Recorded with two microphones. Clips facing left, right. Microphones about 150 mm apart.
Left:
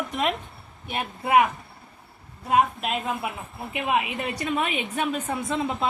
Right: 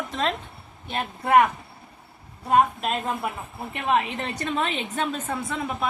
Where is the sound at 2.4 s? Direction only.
Centre (ahead or behind).